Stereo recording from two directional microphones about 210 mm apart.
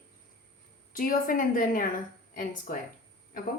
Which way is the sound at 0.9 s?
40° left (ahead or behind).